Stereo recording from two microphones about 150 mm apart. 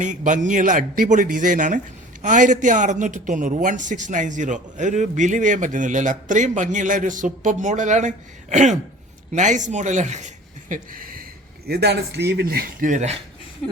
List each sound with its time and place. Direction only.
0.0 s a man's voice: 55° right (ahead or behind); by 11.3 s 75° right (ahead or behind)
11.7 s speech: 90° right; by 13.1 s 55° right (ahead or behind)